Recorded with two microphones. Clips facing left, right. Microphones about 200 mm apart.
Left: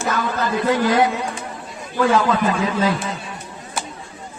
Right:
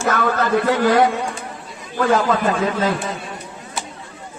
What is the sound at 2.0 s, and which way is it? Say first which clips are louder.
Speech: right 1 dB; 50° right (ahead or behind).